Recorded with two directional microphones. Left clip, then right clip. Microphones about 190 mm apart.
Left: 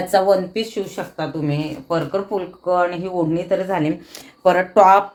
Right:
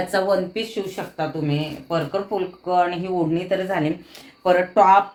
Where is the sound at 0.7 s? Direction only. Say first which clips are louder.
Left 2 dB; 35° left (ahead or behind).